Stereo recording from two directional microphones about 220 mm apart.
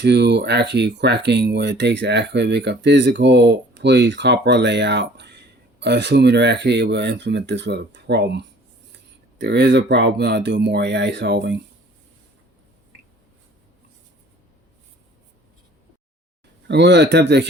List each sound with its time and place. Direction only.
0.0 s speech: 50° right (ahead or behind)
16.6 s speech: 50° right (ahead or behind)